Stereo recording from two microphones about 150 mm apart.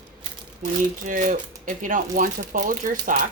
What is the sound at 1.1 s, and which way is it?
Speech, 60° right (ahead or behind).